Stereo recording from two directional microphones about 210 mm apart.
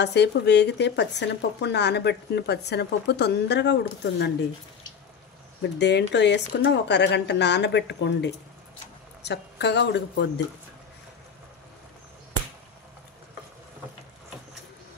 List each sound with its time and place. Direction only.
0.0 s speech: 55° left (ahead or behind)
5.6 s a woman's voice: 55° left (ahead or behind)